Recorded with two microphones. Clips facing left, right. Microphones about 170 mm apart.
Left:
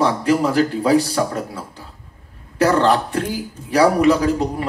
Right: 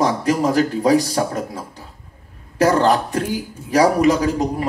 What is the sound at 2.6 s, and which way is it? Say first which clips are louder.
Speech: even; 35° right (ahead or behind).